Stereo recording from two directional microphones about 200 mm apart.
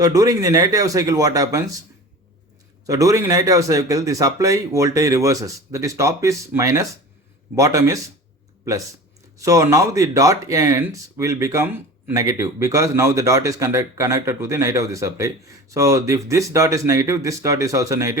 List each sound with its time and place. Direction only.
0.0 s speech: 20° right (ahead or behind)
2.8 s speech: 15° right (ahead or behind)
9.4 s speech: 15° right (ahead or behind)